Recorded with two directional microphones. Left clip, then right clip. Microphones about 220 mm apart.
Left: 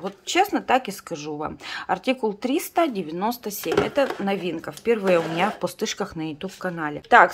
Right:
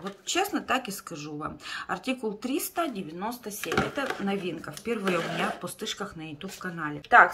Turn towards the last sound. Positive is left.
turn(degrees=25)  # may be behind; listen again after turning